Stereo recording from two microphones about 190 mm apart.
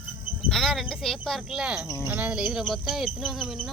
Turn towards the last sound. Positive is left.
turn(degrees=0)  # may be behind; listen again after turning